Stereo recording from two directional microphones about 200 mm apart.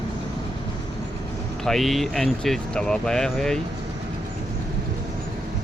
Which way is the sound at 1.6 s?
Centre (ahead or behind).